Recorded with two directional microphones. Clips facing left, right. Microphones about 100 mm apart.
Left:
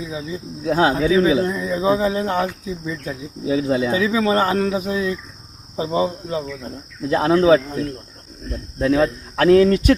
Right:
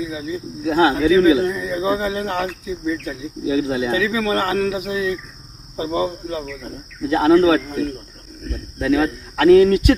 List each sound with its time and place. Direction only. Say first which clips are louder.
0.0 s speech: right 2 dB; 30° left (ahead or behind)
7.1 s speech: right 1 dB; 35° left (ahead or behind)
8.8 s speech: left 1 dB; 35° left (ahead or behind)